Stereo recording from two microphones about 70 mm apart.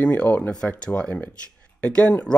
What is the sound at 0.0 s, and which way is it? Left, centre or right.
A man's voice, centre.